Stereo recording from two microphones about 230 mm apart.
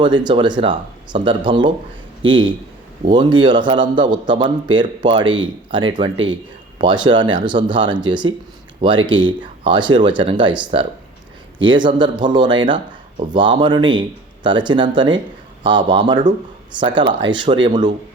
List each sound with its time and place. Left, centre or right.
0.0 s a man's voice: centre
3.1 s a man's voice: centre